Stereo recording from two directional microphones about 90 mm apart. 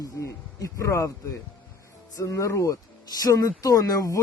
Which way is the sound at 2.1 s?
40° left (ahead or behind).